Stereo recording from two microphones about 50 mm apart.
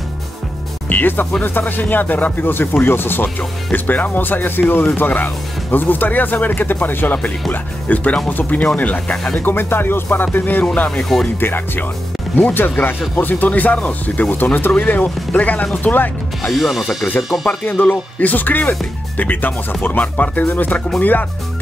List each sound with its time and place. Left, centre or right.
0.8 s speech: left
3.7 s speech: left; by 9.4 s centre
9.4 s speech: left
16.4 s speech: centre
17.7 s speech: left